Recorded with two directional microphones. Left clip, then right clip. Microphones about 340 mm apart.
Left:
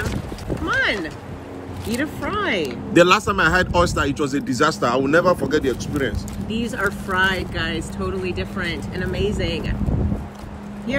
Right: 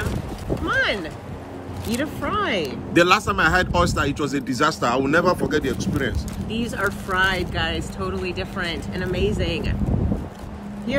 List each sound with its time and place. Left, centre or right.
0.7 s a sound: centre
2.0 s speech: centre
2.9 s speech: centre